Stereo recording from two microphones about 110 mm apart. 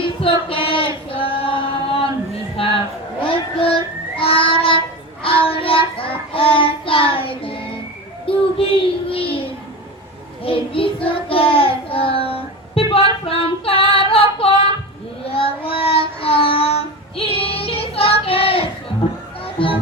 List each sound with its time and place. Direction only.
0.0 s female singing: 55° left (ahead or behind)
2.6 s child singing: 55° left (ahead or behind)
19.6 s music: 55° left (ahead or behind)